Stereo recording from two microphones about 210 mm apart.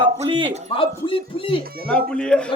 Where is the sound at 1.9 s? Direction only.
5° left (ahead or behind).